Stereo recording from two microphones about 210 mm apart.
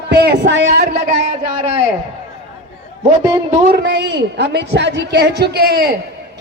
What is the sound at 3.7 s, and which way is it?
A man's voice, 55° right (ahead or behind).